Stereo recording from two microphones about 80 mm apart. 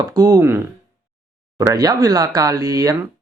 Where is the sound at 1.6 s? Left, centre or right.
Right.